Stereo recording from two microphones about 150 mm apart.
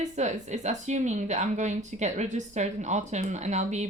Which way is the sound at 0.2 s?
50° right (ahead or behind).